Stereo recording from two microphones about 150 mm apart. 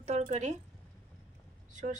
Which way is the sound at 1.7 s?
55° right (ahead or behind).